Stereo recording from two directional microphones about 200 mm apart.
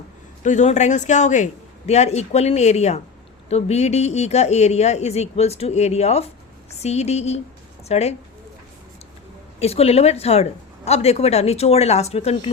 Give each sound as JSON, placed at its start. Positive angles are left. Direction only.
{"t": 0.4, "sound": "a woman's voice", "side_deg": 35}
{"t": 9.6, "sound": "a woman's voice", "side_deg": 30}